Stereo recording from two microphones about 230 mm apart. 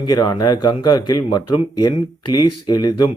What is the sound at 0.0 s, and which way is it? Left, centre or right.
Speech, centre.